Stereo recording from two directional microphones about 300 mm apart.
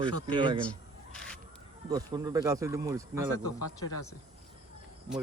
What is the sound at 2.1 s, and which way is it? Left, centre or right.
Speech, centre.